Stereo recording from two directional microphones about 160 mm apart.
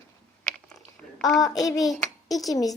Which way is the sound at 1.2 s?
Centre (ahead or behind).